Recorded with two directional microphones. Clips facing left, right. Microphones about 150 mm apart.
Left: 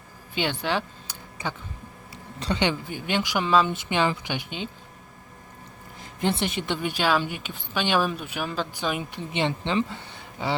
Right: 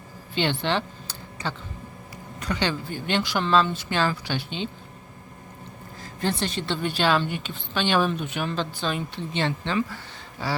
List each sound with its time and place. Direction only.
0.3 s a sound: 10° left (ahead or behind)
2.4 s speech: 25° left (ahead or behind)
6.0 s speech: 20° left (ahead or behind)